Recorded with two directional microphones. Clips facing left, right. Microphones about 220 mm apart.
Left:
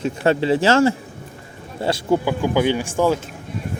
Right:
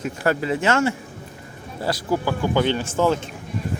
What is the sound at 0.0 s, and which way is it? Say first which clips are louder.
Speech: left 4 dB; 25° left (ahead or behind).